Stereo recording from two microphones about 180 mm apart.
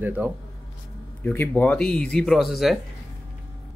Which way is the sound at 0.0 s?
10° right (ahead or behind).